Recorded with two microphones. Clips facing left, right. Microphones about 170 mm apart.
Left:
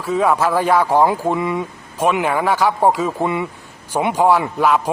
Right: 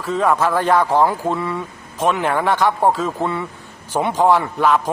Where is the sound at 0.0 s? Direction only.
10° left (ahead or behind).